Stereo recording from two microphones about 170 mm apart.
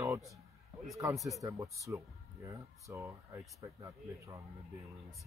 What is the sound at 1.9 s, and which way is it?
Speech, 10° right (ahead or behind).